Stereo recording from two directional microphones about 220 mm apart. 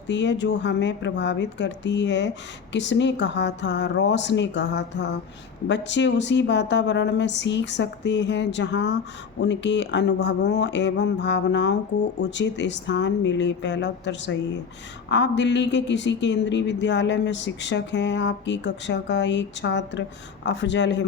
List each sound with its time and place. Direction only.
0.1 s a woman's voice: 55° left (ahead or behind)